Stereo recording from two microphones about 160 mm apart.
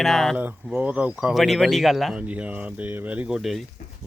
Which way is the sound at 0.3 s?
10° right (ahead or behind).